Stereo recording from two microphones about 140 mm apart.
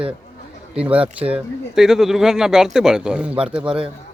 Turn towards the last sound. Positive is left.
turn(degrees=-5)  # may be behind; listen again after turning